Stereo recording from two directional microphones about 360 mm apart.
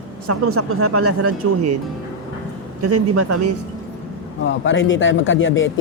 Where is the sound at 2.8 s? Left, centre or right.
Right.